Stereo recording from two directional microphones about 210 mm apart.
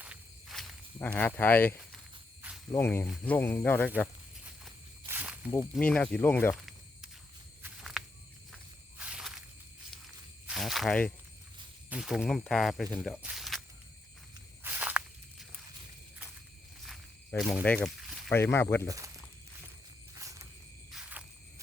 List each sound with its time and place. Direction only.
0.0 s walk: 5° right (ahead or behind)
0.9 s speech: 10° left (ahead or behind)
4.4 s walk: 5° right (ahead or behind)
5.7 s speech: 5° left (ahead or behind)
7.6 s walk: centre (ahead or behind)
9.0 s snake: 5° right (ahead or behind)
10.4 s a sound: centre (ahead or behind)
11.9 s speech: 5° right (ahead or behind)
13.2 s a sound: centre (ahead or behind)
14.6 s walk: 10° right (ahead or behind)
16.8 s snake: centre (ahead or behind)
18.9 s speech: 15° right (ahead or behind)
20.1 s a sound: 15° right (ahead or behind)